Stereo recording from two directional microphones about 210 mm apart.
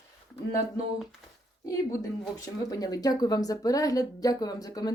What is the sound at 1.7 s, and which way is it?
Speech, 15° left (ahead or behind).